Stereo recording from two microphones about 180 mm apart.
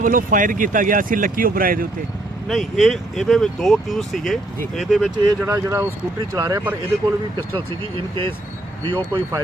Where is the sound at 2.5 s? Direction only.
Centre (ahead or behind).